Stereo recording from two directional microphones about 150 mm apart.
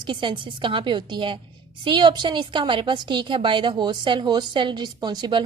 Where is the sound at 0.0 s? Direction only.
30° right (ahead or behind).